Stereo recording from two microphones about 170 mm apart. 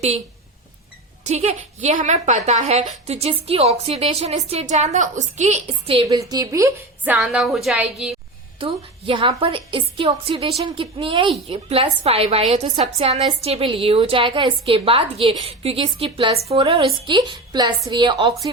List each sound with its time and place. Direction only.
1.2 s a woman's voice: 40° right (ahead or behind)
6.1 s a woman's voice: 20° right (ahead or behind); by 8.1 s centre (ahead or behind)
8.5 s a woman's voice: 30° right (ahead or behind)